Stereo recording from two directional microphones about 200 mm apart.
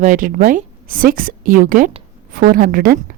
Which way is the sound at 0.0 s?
40° right (ahead or behind).